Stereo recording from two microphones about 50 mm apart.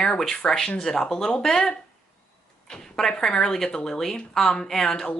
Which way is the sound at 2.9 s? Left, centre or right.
Centre.